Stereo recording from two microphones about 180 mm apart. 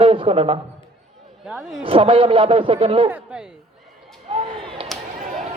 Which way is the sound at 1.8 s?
30° right (ahead or behind).